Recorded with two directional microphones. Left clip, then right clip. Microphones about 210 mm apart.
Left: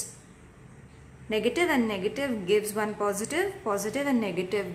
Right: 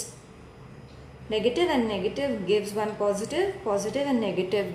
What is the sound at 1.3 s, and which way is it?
A woman's voice, 25° left (ahead or behind).